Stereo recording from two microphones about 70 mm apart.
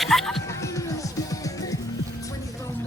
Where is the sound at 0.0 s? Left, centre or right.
Centre.